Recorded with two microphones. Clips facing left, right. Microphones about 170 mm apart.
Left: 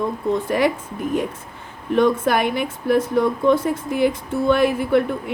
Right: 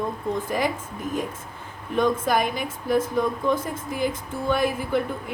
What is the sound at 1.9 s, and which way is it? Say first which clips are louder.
A woman's voice: left 5 dB; 65° left (ahead or behind).